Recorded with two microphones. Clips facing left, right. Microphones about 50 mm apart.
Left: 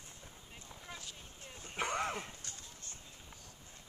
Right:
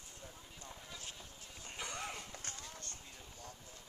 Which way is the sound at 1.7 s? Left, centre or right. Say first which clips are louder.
Left 8 dB; left.